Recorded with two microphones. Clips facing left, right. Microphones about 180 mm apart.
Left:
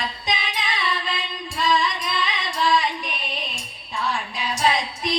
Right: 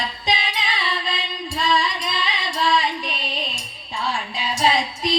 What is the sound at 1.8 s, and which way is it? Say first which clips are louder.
Music: even; 30° right (ahead or behind).